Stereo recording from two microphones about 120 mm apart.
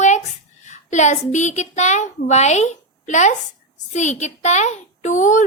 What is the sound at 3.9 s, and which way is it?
A woman's voice, 75° left (ahead or behind).